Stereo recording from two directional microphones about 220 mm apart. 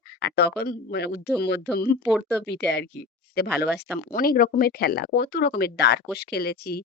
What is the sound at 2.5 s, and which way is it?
Speech, 50° left (ahead or behind).